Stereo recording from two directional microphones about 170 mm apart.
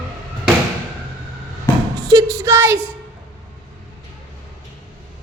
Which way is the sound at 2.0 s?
20° right (ahead or behind).